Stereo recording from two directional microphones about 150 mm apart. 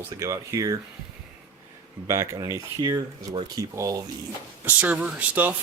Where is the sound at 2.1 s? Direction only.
25° right (ahead or behind).